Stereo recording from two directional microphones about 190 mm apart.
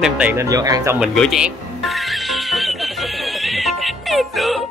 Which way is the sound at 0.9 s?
Centre (ahead or behind).